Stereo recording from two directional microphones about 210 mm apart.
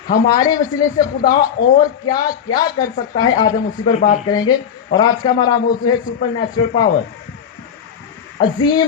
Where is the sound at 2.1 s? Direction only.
20° left (ahead or behind).